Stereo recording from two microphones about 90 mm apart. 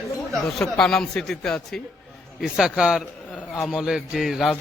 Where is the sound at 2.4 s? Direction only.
10° right (ahead or behind).